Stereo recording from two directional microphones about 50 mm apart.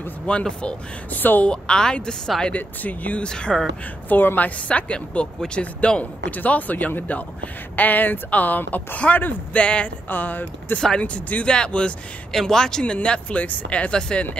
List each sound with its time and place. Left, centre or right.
0.3 s speech: left
1.1 s speech: left
1.4 s speech: centre
2.4 s speech: left
3.3 s speech: centre
4.1 s speech: left
4.6 s speech: left
10.0 s speech: left
11.0 s speech: left
11.4 s speech: centre